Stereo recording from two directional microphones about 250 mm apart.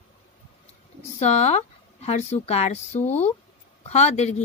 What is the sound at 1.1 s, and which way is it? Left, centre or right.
A woman's voice, left.